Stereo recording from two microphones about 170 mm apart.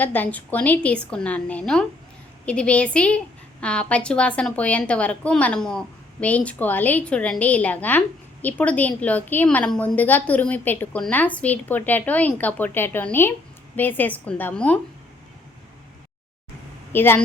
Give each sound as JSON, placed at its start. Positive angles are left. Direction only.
{"t": 0.0, "sound": "a woman's voice", "side_deg": 10}
{"t": 16.9, "sound": "a woman's voice", "side_deg": 10}